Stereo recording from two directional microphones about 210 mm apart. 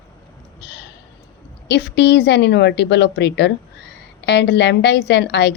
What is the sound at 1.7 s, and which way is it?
A woman's voice, 55° left (ahead or behind).